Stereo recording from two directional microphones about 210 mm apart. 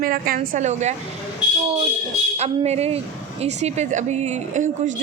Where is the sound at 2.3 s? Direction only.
30° right (ahead or behind).